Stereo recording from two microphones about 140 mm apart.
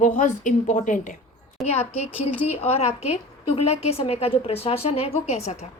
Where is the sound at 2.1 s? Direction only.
45° left (ahead or behind).